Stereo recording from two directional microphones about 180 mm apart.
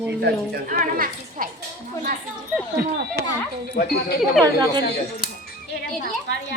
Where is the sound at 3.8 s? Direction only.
50° left (ahead or behind).